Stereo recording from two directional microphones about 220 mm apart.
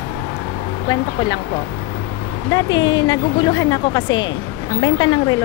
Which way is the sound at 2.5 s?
20° left (ahead or behind).